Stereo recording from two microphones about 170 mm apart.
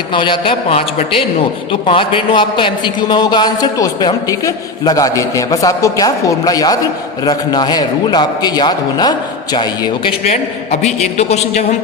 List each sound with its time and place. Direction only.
0.1 s a man's voice: 30° left (ahead or behind)
11.0 s a man's voice: 40° left (ahead or behind)